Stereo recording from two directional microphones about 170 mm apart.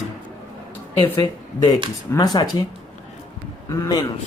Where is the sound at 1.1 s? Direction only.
20° left (ahead or behind).